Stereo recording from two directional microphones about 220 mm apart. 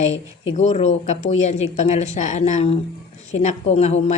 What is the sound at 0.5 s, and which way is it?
Speech, 30° left (ahead or behind).